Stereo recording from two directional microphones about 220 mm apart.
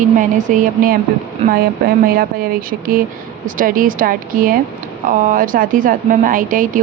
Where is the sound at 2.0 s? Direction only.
40° right (ahead or behind).